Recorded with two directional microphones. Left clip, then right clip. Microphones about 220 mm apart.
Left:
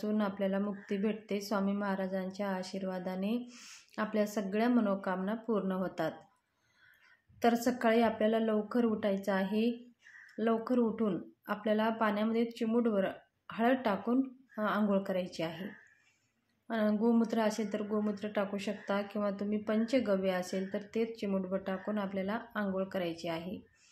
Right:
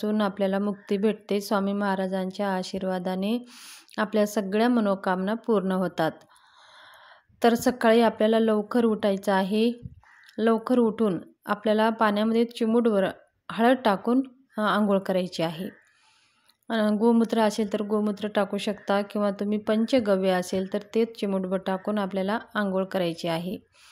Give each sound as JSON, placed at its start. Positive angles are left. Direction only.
{"t": 0.0, "sound": "a woman's voice", "side_deg": -40}
{"t": 7.3, "sound": "a woman's voice", "side_deg": -45}
{"t": 16.6, "sound": "a woman's voice", "side_deg": -40}